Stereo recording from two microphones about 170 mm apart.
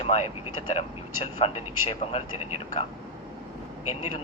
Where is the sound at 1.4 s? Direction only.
35° left (ahead or behind).